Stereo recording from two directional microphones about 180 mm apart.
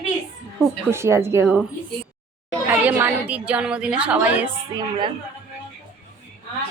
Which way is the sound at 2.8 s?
10° right (ahead or behind).